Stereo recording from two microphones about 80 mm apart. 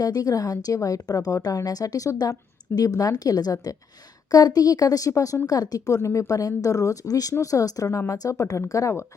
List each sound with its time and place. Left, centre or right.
0.0 s a woman's voice: left